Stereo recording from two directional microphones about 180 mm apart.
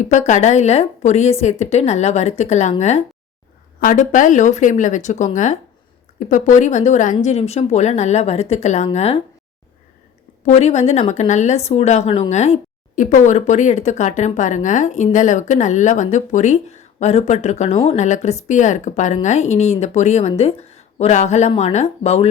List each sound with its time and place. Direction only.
0.0 s a woman's voice: 40° left (ahead or behind)
10.4 s a woman's voice: 40° left (ahead or behind)